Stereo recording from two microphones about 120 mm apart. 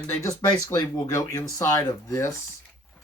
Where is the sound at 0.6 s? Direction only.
25° left (ahead or behind).